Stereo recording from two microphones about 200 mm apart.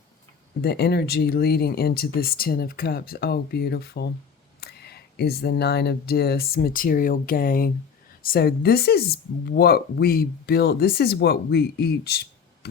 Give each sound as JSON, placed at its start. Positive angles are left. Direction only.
{"t": 0.6, "sound": "a woman's voice", "side_deg": 50}